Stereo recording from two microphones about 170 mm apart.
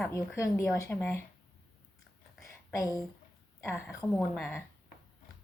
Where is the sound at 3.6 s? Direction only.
15° left (ahead or behind).